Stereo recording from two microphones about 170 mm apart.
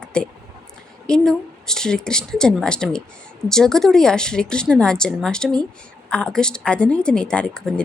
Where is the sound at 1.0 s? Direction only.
5° left (ahead or behind).